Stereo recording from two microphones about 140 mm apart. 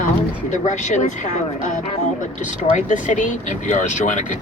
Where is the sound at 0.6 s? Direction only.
60° left (ahead or behind).